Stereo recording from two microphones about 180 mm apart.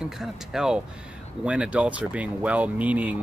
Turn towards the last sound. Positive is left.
turn(degrees=-10)  # may be behind; listen again after turning